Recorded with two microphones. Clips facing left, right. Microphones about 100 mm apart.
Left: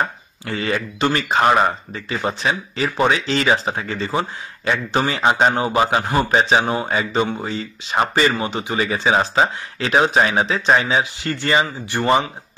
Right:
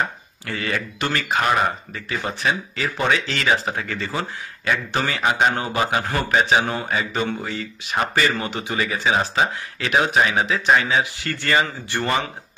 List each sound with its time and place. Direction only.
0.5 s speech: 25° left (ahead or behind)